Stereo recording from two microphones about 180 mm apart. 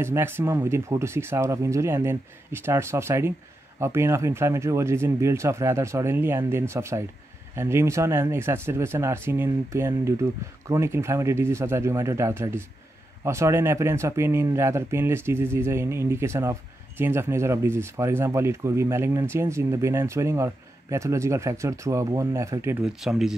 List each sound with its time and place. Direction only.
0.0 s speech: 15° right (ahead or behind)
22.9 s speech: centre (ahead or behind)